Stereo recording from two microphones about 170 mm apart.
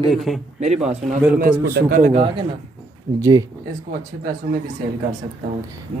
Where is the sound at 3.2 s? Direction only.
20° right (ahead or behind).